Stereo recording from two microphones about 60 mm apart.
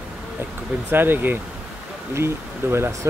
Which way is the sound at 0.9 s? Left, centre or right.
Right.